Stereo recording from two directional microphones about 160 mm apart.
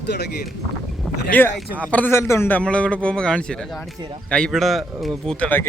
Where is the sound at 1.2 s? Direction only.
10° left (ahead or behind).